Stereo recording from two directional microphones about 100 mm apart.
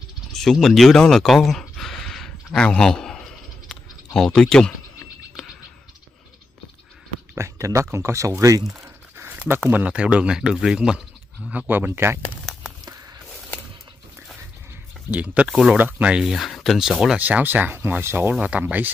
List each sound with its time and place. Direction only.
0.3 s a sound: 5° left (ahead or behind)
7.3 s speech: 30° right (ahead or behind); by 11.5 s 5° right (ahead or behind)
11.5 s speech: 15° right (ahead or behind)
15.0 s speech: 15° right (ahead or behind)
17.2 s speech: 15° right (ahead or behind)